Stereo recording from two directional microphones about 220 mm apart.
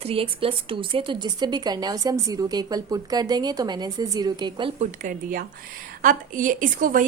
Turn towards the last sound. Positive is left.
turn(degrees=-40)  # may be behind; listen again after turning